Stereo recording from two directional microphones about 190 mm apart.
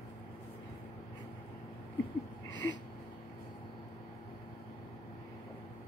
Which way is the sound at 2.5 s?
70° left (ahead or behind).